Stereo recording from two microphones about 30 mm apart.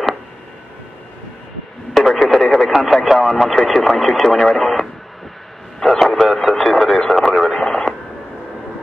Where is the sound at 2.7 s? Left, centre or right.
Centre.